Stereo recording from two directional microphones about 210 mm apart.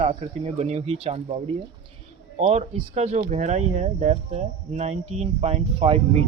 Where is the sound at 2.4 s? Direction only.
30° right (ahead or behind).